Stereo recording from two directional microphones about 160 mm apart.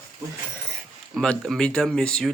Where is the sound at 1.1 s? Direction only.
5° left (ahead or behind).